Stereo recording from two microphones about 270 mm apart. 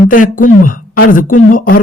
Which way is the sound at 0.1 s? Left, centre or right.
Left.